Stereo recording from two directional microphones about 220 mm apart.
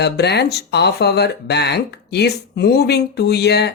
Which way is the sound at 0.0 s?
50° left (ahead or behind).